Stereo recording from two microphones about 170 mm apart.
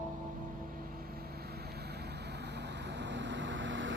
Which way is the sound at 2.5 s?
90° right.